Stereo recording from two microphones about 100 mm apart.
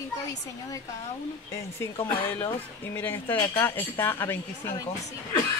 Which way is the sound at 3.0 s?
20° left (ahead or behind).